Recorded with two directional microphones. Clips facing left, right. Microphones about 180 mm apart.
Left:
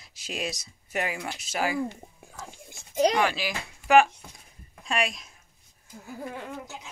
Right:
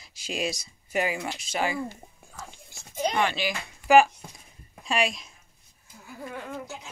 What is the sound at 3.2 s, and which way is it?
Speech, 5° left (ahead or behind).